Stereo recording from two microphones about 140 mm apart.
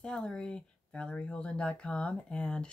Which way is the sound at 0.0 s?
5° left (ahead or behind).